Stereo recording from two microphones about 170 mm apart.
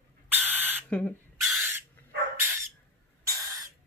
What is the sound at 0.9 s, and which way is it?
Owl, 10° left (ahead or behind).